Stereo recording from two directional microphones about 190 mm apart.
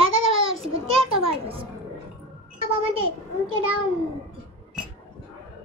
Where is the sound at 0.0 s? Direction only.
30° right (ahead or behind).